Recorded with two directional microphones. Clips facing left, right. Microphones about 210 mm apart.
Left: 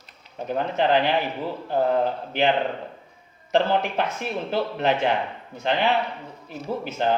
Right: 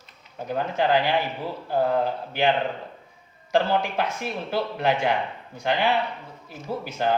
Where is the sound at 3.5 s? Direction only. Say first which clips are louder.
Left 1 dB; 20° left (ahead or behind).